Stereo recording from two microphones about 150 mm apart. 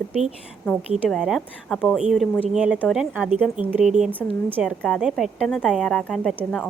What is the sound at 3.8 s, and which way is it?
Speech, 50° right (ahead or behind).